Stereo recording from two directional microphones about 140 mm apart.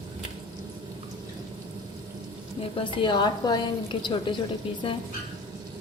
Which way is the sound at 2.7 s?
35° left (ahead or behind).